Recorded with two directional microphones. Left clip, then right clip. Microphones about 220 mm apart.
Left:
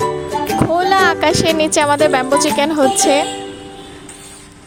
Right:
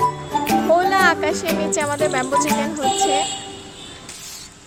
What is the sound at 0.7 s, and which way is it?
Speech, 45° left (ahead or behind).